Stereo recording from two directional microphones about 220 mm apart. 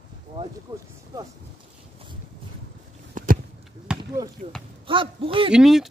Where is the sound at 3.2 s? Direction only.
35° right (ahead or behind).